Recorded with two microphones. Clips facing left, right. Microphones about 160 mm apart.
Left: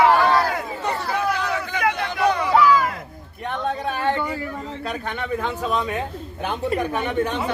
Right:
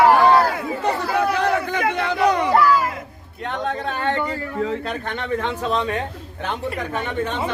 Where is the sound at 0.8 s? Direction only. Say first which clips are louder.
Right 5 dB; 60° right (ahead or behind).